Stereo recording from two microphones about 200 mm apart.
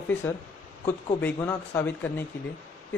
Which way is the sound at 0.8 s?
10° left (ahead or behind).